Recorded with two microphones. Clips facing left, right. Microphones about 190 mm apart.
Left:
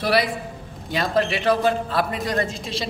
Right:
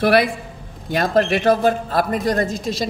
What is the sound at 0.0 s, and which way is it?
A woman's voice, 55° right (ahead or behind).